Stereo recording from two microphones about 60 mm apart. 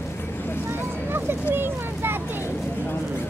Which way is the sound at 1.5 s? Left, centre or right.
Right.